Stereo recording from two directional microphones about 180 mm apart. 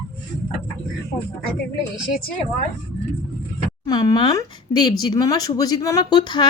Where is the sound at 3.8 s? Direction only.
20° left (ahead or behind).